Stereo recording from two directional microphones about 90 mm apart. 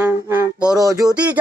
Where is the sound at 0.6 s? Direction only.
40° right (ahead or behind).